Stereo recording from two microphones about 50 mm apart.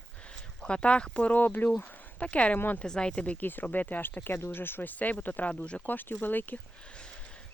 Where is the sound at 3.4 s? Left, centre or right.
Left.